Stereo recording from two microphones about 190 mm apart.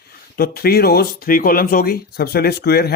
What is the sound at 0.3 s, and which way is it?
Speech, 55° left (ahead or behind).